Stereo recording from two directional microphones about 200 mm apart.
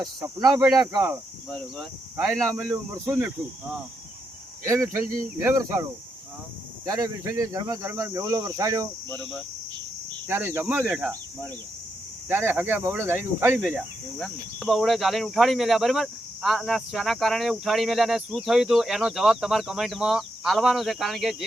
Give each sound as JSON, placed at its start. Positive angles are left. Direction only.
{"t": 0.2, "sound": "speech", "side_deg": -20}
{"t": 1.5, "sound": "speech", "side_deg": 0}
{"t": 4.6, "sound": "speech", "side_deg": -15}
{"t": 6.8, "sound": "speech", "side_deg": -15}
{"t": 9.0, "sound": "speech", "side_deg": 10}
{"t": 10.2, "sound": "speech", "side_deg": -10}
{"t": 12.3, "sound": "speech", "side_deg": -10}
{"t": 13.6, "sound": "speech", "side_deg": 0}